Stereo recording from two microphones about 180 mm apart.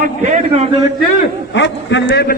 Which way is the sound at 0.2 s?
40° right (ahead or behind).